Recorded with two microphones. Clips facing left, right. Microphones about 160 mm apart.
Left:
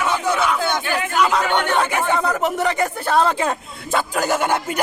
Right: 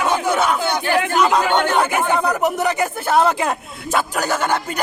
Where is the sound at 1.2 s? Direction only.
10° right (ahead or behind).